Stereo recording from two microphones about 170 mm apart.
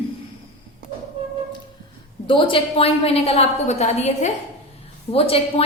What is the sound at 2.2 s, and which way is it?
A woman's voice, 30° left (ahead or behind).